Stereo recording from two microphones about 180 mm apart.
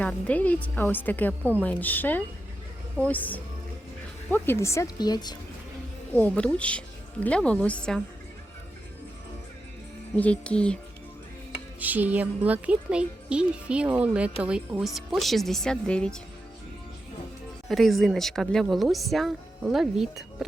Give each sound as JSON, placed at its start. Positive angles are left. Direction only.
{"t": 0.0, "sound": "a woman's voice", "side_deg": 5}
{"t": 6.1, "sound": "a woman's voice", "side_deg": 5}
{"t": 10.2, "sound": "speech", "side_deg": 5}
{"t": 11.8, "sound": "speech", "side_deg": -10}
{"t": 17.7, "sound": "speech", "side_deg": 0}